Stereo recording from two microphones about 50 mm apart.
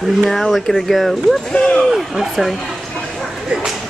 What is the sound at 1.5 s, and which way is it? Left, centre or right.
Speech, centre.